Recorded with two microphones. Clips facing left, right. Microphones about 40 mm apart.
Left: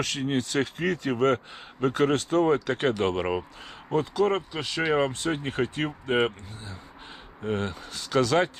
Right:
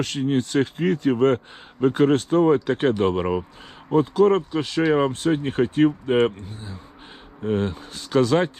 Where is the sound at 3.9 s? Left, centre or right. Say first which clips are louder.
Right 6 dB; right.